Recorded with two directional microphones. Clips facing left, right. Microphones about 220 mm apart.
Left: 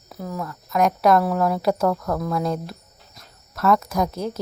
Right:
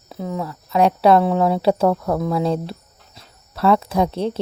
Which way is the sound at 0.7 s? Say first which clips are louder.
Right 3 dB; 30° right (ahead or behind).